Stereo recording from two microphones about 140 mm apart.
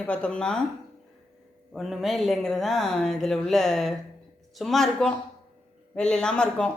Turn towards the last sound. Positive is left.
turn(degrees=5)  # may be behind; listen again after turning